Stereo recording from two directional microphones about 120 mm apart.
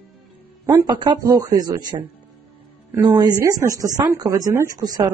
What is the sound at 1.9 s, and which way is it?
Speech, 45° right (ahead or behind).